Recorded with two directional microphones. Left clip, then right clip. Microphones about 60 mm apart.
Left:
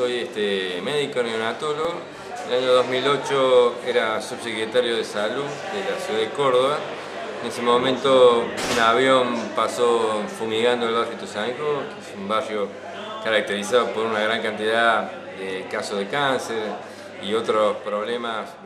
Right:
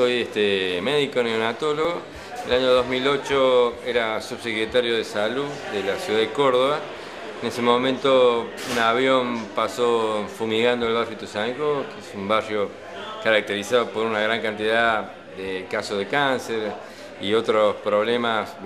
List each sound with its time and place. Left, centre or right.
0.0 s speech: left